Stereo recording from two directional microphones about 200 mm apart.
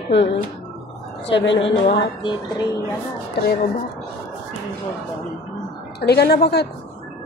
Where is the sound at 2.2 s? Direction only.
25° left (ahead or behind).